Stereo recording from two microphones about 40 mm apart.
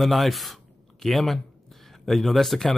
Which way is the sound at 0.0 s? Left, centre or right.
Centre.